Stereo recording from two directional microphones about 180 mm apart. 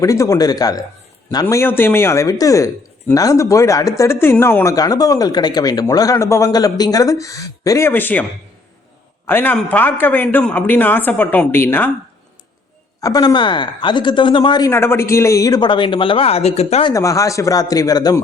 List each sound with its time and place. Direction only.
0.0 s a man's voice: 20° left (ahead or behind)
9.2 s a man's voice: 10° left (ahead or behind)
13.0 s speech: 20° left (ahead or behind); by 16.9 s 35° left (ahead or behind)
16.9 s a man's voice: 20° left (ahead or behind)